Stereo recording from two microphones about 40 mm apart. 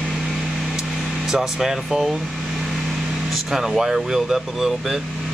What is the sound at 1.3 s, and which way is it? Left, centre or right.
Speech, centre.